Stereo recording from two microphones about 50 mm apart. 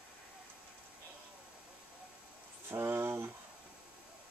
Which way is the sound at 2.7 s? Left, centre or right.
Right.